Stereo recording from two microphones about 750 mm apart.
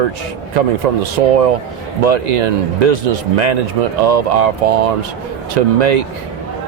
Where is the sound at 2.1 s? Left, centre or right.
Right.